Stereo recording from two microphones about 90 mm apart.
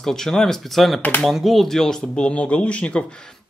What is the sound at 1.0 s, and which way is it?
Speech, 20° left (ahead or behind).